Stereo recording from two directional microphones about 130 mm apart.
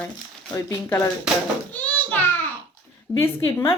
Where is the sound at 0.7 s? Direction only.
20° left (ahead or behind).